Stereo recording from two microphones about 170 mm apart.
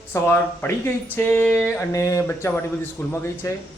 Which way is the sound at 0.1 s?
10° left (ahead or behind).